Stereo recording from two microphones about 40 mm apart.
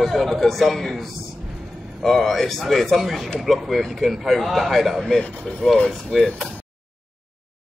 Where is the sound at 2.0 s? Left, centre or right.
Centre.